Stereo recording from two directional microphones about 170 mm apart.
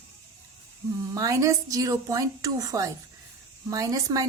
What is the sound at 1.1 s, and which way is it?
Speech, 20° right (ahead or behind).